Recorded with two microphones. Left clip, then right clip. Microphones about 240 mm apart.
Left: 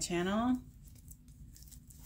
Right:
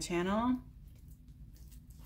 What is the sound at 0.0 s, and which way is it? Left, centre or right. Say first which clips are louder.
Speech: right 1 dB; centre.